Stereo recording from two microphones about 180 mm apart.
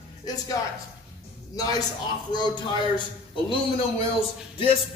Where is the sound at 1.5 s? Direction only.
20° left (ahead or behind).